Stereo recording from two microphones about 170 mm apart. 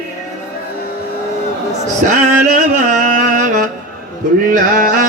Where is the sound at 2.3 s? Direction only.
45° right (ahead or behind).